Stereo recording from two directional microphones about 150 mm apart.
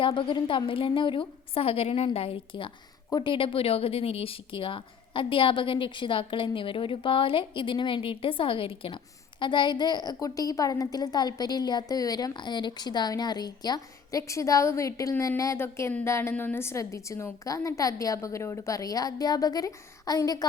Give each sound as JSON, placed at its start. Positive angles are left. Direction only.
{"t": 0.0, "sound": "a woman's voice", "side_deg": 35}